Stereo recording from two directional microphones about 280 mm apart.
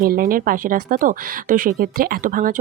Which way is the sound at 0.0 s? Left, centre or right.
Right.